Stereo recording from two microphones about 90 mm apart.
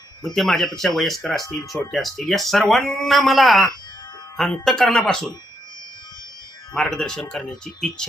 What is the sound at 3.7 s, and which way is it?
Music, 55° left (ahead or behind).